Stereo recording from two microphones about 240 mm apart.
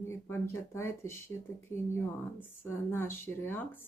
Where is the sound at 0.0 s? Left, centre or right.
Centre.